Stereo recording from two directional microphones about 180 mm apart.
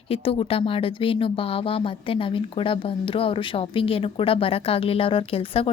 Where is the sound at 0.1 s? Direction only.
30° left (ahead or behind).